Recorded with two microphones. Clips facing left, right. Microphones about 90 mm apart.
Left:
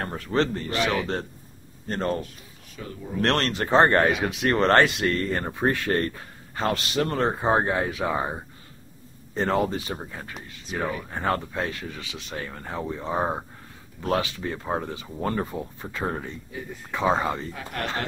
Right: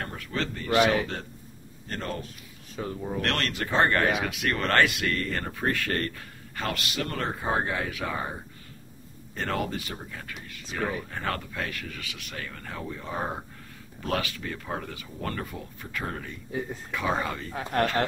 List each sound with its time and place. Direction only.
0.0 s speech: 35° left (ahead or behind)
1.9 s speech: 35° left (ahead or behind)
2.7 s speech: 35° right (ahead or behind)
3.2 s speech: 30° left (ahead or behind)
17.5 s speech: 35° right (ahead or behind)